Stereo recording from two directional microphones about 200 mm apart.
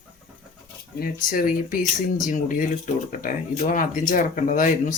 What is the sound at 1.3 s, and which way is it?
Speech, 45° left (ahead or behind).